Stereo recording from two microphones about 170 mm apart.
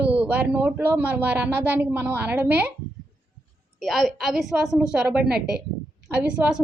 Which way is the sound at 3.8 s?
Centre (ahead or behind).